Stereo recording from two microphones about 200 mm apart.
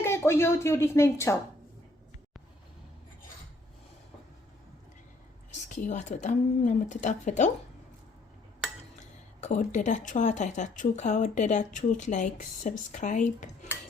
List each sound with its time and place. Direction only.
0.0 s a woman's voice: 10° left (ahead or behind)
5.7 s speech: 40° left (ahead or behind)
9.4 s speech: 35° left (ahead or behind)